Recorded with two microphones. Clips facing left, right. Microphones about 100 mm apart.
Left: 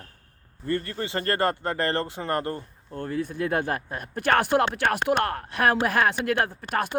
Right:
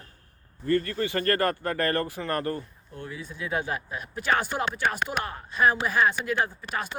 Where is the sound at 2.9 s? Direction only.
50° left (ahead or behind).